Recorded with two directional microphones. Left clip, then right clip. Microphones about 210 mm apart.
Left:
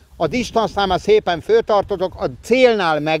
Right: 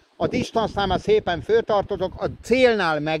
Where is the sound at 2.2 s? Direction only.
15° left (ahead or behind).